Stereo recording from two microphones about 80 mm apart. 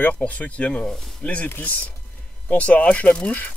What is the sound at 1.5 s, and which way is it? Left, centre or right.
Speech, left.